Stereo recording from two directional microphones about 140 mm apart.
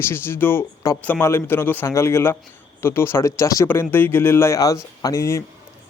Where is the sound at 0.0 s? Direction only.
15° left (ahead or behind).